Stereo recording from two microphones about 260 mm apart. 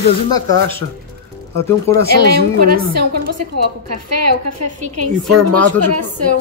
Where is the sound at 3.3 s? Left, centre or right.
Right.